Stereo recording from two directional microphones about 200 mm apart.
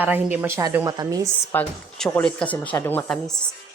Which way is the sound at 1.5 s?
5° left (ahead or behind).